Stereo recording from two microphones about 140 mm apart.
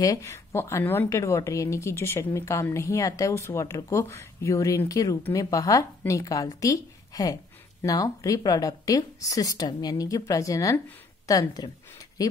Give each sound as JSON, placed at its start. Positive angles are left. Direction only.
{"t": 0.0, "sound": "speech", "side_deg": 25}